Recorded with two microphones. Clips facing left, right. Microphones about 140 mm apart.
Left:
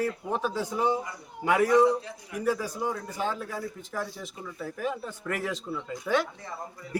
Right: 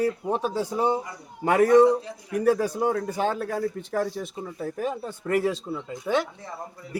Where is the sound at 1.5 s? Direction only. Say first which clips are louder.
Right 5 dB; 50° right (ahead or behind).